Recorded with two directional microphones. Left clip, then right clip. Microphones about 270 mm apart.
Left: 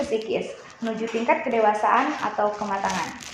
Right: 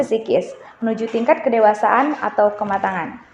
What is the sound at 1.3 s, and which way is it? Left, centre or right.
A woman's voice, right.